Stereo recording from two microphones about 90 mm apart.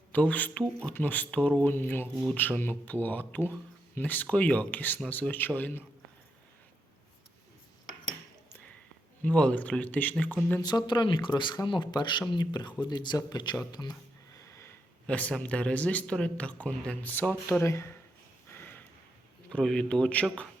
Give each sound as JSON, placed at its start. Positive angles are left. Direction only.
{"t": 0.1, "sound": "speech", "side_deg": 15}
{"t": 1.7, "sound": "speech", "side_deg": 25}
{"t": 9.2, "sound": "speech", "side_deg": 15}
{"t": 10.6, "sound": "speech", "side_deg": 50}
{"t": 15.0, "sound": "speech", "side_deg": 15}
{"t": 17.6, "sound": "speech", "side_deg": 30}
{"t": 18.5, "sound": "a sound", "side_deg": 20}
{"t": 19.5, "sound": "speech", "side_deg": 10}